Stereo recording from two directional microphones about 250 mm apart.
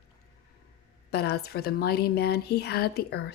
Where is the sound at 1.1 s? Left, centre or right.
Left.